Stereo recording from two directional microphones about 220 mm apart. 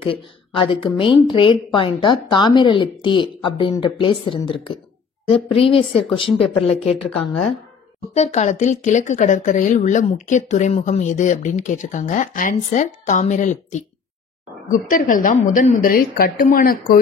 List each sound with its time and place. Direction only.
0.0 s a woman's voice: 25° left (ahead or behind)
6.9 s speech: 5° left (ahead or behind)
8.1 s speech: 30° left (ahead or behind)
14.9 s speech: 35° left (ahead or behind)